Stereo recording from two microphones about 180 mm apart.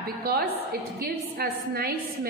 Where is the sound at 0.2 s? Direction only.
60° right (ahead or behind).